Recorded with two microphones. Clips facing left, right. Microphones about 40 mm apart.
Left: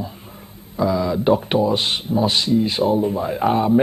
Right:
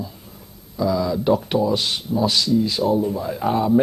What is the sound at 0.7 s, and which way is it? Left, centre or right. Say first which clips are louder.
Speech: left 1 dB; left.